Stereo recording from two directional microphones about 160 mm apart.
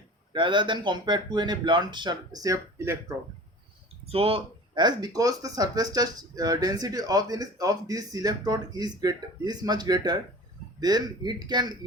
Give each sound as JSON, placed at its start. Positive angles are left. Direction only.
{"t": 0.3, "sound": "speech", "side_deg": -30}
{"t": 4.0, "sound": "speech", "side_deg": -35}